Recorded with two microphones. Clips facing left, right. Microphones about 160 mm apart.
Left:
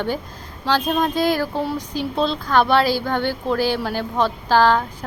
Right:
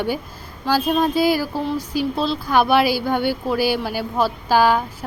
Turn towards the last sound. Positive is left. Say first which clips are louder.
# even
turn(degrees=-10)  # may be behind; listen again after turning